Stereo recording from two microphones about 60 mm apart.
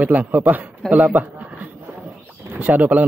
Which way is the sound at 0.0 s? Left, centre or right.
Right.